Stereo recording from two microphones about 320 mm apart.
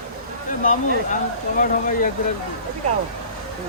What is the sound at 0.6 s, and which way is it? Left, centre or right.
Speech, left.